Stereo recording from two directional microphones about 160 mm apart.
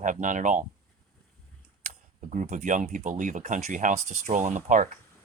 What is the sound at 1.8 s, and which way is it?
Speech, 45° right (ahead or behind).